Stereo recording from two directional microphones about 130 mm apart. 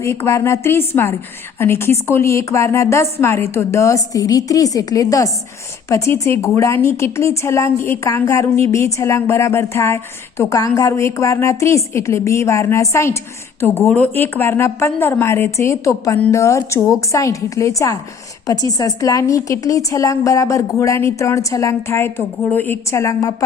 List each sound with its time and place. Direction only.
0.0 s a woman's voice: 20° left (ahead or behind)